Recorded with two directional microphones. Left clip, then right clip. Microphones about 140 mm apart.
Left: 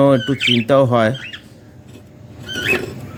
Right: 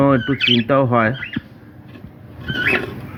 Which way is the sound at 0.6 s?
45° left (ahead or behind).